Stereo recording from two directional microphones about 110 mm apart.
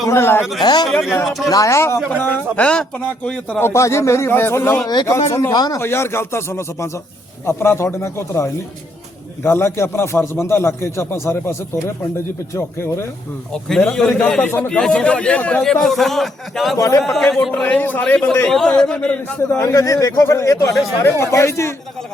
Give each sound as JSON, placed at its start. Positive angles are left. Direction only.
{"t": 0.0, "sound": "a man's voice", "side_deg": 25}
{"t": 0.6, "sound": "speech", "side_deg": 40}
{"t": 0.9, "sound": "a man's voice", "side_deg": 0}
{"t": 1.5, "sound": "a man's voice", "side_deg": 30}
{"t": 2.1, "sound": "a man's voice", "side_deg": 15}
{"t": 3.6, "sound": "a man's voice", "side_deg": 25}
{"t": 5.5, "sound": "speech", "side_deg": 40}
{"t": 5.8, "sound": "a man's voice", "side_deg": 25}
{"t": 12.5, "sound": "a man's voice", "side_deg": 25}
{"t": 13.5, "sound": "a man's voice", "side_deg": 5}
{"t": 16.7, "sound": "speech", "side_deg": 30}
{"t": 17.0, "sound": "a man's voice", "side_deg": 5}
{"t": 19.4, "sound": "a man's voice", "side_deg": 25}